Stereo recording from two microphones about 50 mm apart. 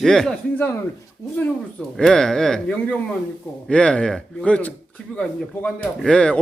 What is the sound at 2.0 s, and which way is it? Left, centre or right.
Speech, centre.